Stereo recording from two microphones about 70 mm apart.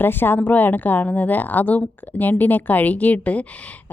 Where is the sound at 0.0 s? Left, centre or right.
Left.